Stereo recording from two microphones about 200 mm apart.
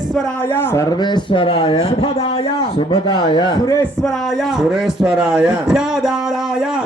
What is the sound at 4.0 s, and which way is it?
A man's voice, centre (ahead or behind).